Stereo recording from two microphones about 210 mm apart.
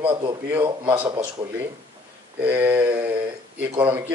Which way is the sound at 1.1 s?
20° right (ahead or behind).